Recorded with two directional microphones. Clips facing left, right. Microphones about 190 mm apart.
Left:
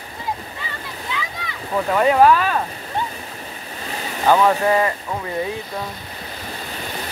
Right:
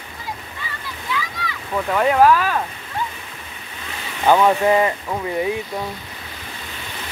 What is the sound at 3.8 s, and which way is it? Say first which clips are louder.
Waves: left 4 dB; 40° left (ahead or behind).